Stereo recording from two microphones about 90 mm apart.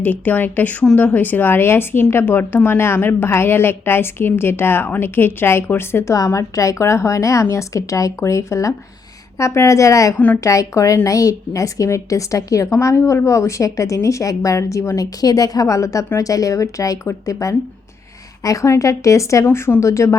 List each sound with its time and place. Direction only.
0.0 s a woman's voice: 20° left (ahead or behind)